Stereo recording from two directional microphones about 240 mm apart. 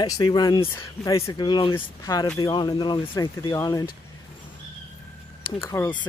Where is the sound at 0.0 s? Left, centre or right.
Centre.